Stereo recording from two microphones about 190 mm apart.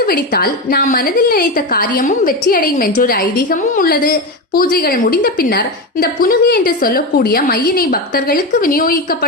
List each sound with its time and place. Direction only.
0.0 s a woman's voice: 50° left (ahead or behind)